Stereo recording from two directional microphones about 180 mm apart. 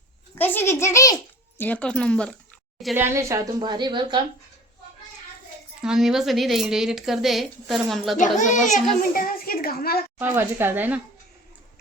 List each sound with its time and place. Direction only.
0.3 s a child's voice: 10° left (ahead or behind)
2.9 s a woman's voice: 15° right (ahead or behind)
5.8 s speech: 5° right (ahead or behind)
8.4 s a child's voice: 45° left (ahead or behind)
8.7 s speech: centre (ahead or behind)
9.1 s a woman's voice: 55° left (ahead or behind)
10.2 s speech: 10° right (ahead or behind)